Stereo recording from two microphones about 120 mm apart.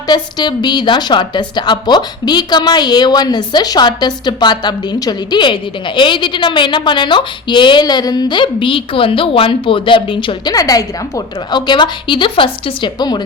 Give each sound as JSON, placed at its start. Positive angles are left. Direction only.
{"t": 0.1, "sound": "a woman's voice", "side_deg": 35}
{"t": 10.5, "sound": "a woman's voice", "side_deg": 30}